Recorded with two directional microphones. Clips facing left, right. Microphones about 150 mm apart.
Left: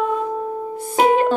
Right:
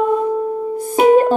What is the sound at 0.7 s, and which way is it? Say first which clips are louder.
Music: right 5 dB; 45° right (ahead or behind).